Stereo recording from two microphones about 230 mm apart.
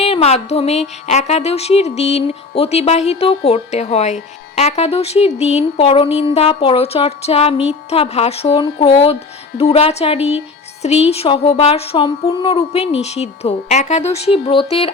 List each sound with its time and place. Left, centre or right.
0.0 s a woman's voice: left